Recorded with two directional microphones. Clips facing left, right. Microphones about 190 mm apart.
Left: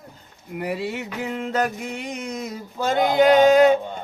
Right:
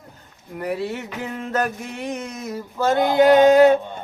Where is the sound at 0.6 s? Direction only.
15° left (ahead or behind).